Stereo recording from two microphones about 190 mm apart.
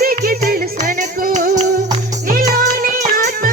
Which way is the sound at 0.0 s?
50° right (ahead or behind).